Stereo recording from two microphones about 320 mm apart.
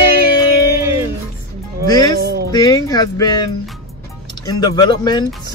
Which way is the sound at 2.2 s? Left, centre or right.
Right.